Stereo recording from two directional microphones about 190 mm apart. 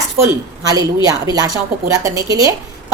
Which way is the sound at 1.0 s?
20° right (ahead or behind).